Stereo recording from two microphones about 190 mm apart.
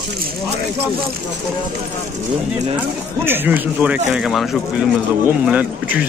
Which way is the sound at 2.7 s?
10° right (ahead or behind).